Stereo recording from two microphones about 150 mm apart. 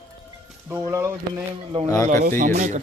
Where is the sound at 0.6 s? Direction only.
15° right (ahead or behind).